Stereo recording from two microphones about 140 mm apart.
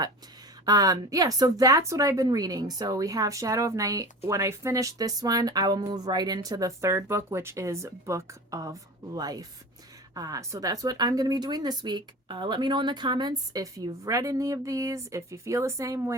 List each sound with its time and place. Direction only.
0.6 s speech: 25° right (ahead or behind)